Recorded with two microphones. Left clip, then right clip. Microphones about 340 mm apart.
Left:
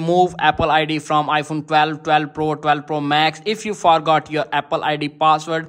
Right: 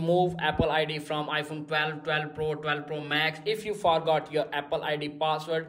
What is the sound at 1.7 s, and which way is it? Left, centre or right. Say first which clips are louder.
A man's voice: left 13 dB; centre.